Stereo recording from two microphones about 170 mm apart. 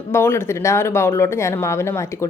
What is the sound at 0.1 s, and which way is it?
A woman's voice, 15° left (ahead or behind).